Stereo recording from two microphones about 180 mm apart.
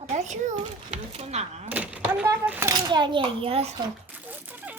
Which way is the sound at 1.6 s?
10° right (ahead or behind).